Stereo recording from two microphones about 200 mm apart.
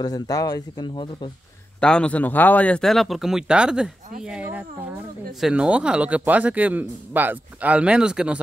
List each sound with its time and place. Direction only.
0.0 s speech: 20° left (ahead or behind)
1.8 s speech: 5° left (ahead or behind)